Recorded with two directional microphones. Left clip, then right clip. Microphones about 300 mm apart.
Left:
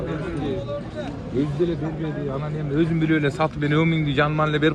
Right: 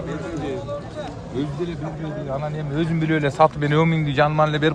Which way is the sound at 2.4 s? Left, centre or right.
Right.